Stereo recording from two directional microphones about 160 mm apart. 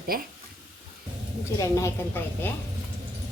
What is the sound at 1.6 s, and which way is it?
Speech, 20° left (ahead or behind).